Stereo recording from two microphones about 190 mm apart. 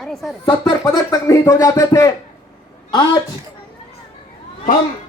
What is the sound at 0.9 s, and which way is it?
Speech, 15° left (ahead or behind).